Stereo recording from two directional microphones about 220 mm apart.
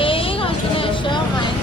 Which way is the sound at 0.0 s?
25° left (ahead or behind).